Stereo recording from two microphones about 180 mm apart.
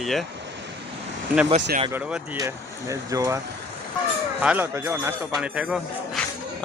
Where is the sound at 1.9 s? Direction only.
5° right (ahead or behind).